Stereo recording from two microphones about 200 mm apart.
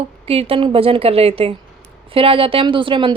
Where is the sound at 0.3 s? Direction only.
30° right (ahead or behind).